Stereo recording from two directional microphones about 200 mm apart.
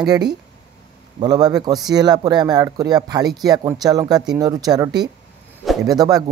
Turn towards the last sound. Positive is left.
turn(degrees=-20)  # may be behind; listen again after turning